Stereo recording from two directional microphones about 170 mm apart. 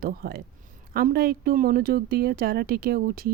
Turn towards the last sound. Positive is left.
turn(degrees=-60)  # may be behind; listen again after turning